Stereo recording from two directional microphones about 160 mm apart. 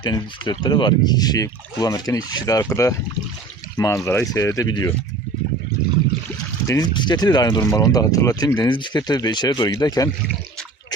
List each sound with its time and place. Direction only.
0.0 s speech: 30° left (ahead or behind)
6.7 s speech: 25° left (ahead or behind)